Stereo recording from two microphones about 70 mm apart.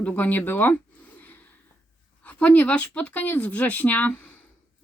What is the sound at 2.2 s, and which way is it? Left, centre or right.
Speech, left.